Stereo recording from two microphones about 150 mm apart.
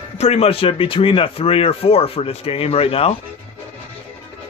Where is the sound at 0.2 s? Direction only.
45° left (ahead or behind).